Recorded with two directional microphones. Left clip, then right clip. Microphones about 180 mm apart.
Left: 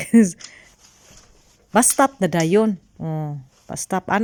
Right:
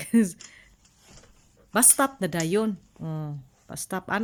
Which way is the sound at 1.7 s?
25° left (ahead or behind).